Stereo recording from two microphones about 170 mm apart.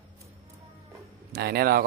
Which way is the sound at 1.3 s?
65° right (ahead or behind).